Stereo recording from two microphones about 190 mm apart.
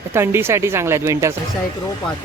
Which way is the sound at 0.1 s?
15° right (ahead or behind).